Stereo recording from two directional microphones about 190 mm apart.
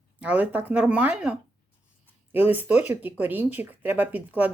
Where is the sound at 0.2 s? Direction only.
5° right (ahead or behind).